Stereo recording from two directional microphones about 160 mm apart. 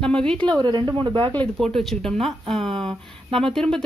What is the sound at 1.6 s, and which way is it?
A woman's voice, centre (ahead or behind).